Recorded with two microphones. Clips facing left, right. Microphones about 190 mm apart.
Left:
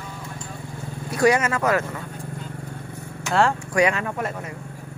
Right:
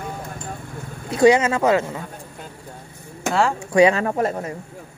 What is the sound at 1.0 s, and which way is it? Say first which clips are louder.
Speech: right 4 dB; 25° right (ahead or behind).